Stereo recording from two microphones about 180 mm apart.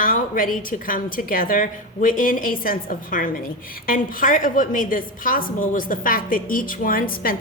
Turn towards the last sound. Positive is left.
turn(degrees=50)  # may be behind; listen again after turning